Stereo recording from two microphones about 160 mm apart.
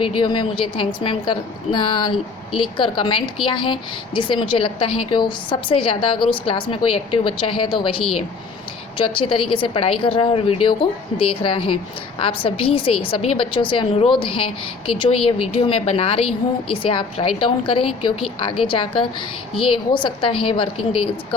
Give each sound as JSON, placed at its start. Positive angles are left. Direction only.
{"t": 0.0, "sound": "a woman's voice", "side_deg": 30}